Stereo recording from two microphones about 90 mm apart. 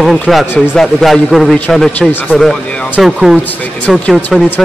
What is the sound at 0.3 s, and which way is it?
A man's voice, centre (ahead or behind).